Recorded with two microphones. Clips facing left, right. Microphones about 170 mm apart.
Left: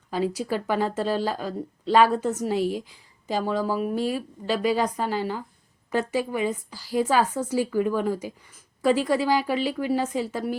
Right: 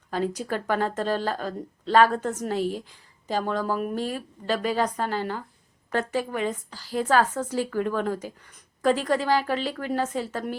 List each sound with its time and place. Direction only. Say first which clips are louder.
0.1 s speech: left 2 dB; 10° left (ahead or behind)